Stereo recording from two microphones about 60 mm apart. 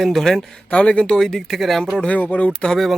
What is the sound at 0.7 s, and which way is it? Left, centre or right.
Speech, centre.